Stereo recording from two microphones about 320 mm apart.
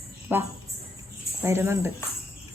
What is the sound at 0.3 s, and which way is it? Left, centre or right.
Speech, centre.